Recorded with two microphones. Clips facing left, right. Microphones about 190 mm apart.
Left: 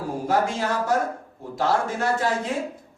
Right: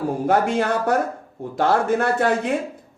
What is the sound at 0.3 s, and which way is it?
Speech, 60° right (ahead or behind).